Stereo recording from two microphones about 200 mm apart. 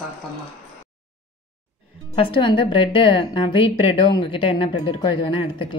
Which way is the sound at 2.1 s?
25° left (ahead or behind).